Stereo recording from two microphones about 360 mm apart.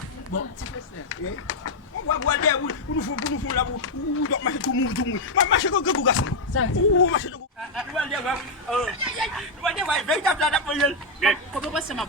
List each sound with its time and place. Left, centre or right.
1.1 s speech: left
7.8 s speech: centre